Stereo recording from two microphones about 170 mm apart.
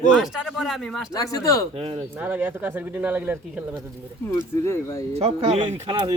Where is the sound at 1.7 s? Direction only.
35° right (ahead or behind).